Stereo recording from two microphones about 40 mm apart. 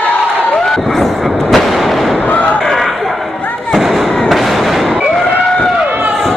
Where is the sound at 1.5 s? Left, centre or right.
Centre.